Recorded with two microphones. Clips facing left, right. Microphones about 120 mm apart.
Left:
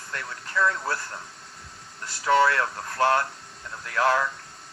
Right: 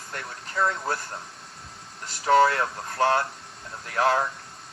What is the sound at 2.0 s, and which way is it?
Speech, 25° right (ahead or behind).